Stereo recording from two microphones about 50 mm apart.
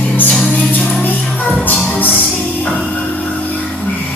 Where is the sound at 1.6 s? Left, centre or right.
Left.